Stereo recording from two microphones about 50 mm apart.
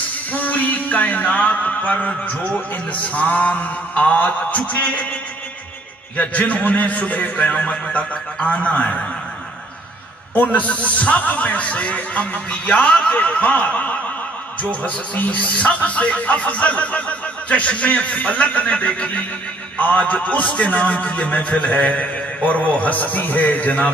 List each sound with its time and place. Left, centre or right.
0.3 s a sound: left
6.1 s speech: left
10.3 s speech: left